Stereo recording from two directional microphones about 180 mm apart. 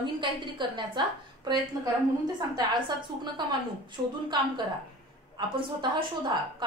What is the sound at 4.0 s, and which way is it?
Speech, 25° right (ahead or behind).